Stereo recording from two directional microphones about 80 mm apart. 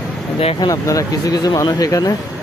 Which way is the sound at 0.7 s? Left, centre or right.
Left.